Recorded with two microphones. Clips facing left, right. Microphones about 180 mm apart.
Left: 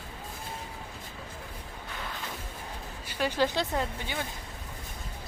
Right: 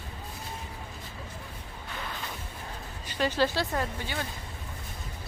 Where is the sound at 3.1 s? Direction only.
10° left (ahead or behind).